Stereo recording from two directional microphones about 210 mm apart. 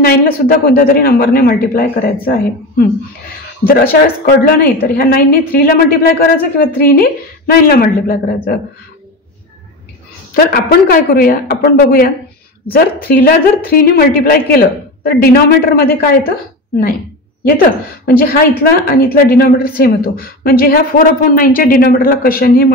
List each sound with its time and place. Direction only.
0.0 s a woman's voice: 45° left (ahead or behind)
4.5 s a woman's voice: 45° left (ahead or behind)
10.3 s a woman's voice: 45° left (ahead or behind)
18.0 s a woman's voice: 45° left (ahead or behind)